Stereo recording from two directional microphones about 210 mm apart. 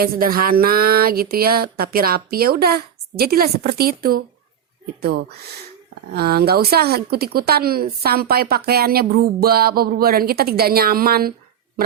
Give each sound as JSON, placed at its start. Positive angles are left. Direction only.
{"t": 0.0, "sound": "a woman's voice", "side_deg": -45}